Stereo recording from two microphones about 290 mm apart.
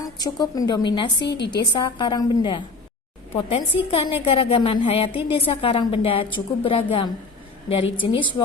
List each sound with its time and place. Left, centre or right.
0.0 s a woman's voice: centre
8.1 s a woman's voice: centre